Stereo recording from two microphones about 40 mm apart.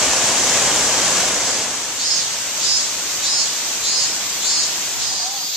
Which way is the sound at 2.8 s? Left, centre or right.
Centre.